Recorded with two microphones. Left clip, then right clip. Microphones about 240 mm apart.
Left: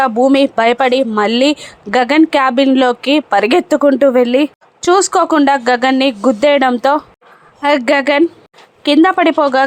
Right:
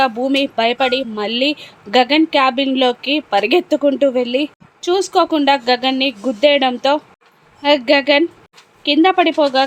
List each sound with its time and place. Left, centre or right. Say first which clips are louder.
0.0 s speech: left 5 dB; centre